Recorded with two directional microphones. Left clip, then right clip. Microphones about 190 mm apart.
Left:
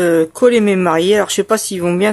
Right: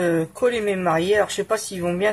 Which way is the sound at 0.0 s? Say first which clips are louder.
Left 9 dB; 40° left (ahead or behind).